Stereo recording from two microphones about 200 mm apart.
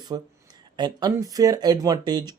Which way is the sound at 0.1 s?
20° right (ahead or behind).